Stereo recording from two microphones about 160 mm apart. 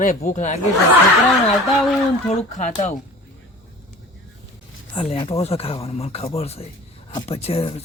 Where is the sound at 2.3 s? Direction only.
50° left (ahead or behind).